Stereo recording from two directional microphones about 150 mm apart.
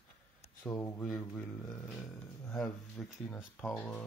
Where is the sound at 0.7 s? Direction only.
Centre (ahead or behind).